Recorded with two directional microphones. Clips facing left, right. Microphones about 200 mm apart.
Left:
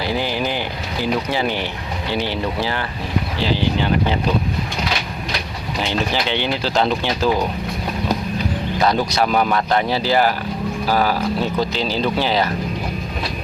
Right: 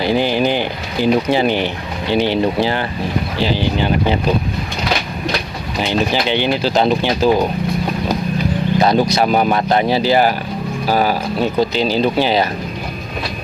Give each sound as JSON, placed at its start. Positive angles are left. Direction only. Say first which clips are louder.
{"t": 0.0, "sound": "a sound", "louder": "right 6 dB", "side_deg": -20}
{"t": 1.0, "sound": "speech", "louder": "right 7 dB", "side_deg": -20}
{"t": 5.9, "sound": "speech", "louder": "right 5 dB", "side_deg": -15}
{"t": 8.8, "sound": "speech", "louder": "right 3 dB", "side_deg": -20}